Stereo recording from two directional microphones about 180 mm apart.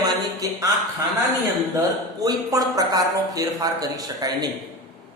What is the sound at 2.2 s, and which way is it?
Speech, 20° right (ahead or behind).